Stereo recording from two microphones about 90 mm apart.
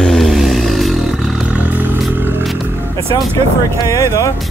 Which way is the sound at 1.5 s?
20° right (ahead or behind).